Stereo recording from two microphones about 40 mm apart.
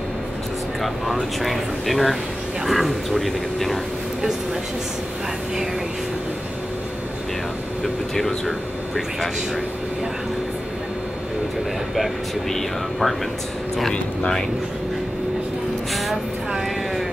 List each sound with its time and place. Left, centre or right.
1.4 s speech: centre
7.8 s speech: centre
11.9 s speech: centre